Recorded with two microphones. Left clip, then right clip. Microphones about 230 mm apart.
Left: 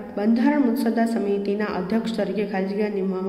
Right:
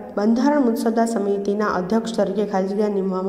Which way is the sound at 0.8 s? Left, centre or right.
Centre.